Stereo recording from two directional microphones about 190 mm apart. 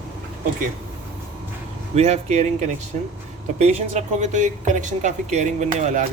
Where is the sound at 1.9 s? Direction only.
35° right (ahead or behind).